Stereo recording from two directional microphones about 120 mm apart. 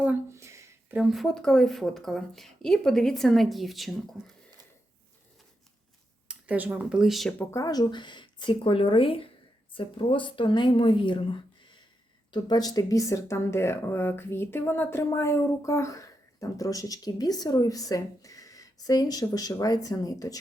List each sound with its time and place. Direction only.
0.3 s a sound: 25° right (ahead or behind)
0.9 s speech: centre (ahead or behind)
6.2 s speech: 10° right (ahead or behind)
7.5 s speech: 30° left (ahead or behind)